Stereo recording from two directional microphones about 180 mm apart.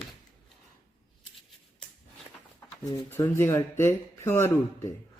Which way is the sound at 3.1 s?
15° left (ahead or behind).